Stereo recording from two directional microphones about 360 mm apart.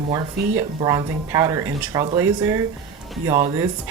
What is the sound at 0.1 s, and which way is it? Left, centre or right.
Speech, centre.